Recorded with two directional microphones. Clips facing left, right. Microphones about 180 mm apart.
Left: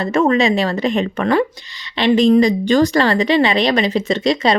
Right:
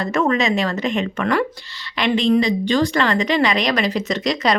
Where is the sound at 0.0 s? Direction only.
30° left (ahead or behind).